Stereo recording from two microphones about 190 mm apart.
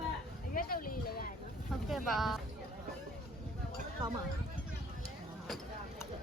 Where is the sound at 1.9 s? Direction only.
Centre (ahead or behind).